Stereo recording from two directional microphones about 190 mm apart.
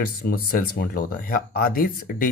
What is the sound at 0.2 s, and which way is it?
Speech, 50° left (ahead or behind).